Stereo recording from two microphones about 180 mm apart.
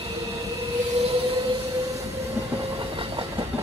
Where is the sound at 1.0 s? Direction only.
35° right (ahead or behind).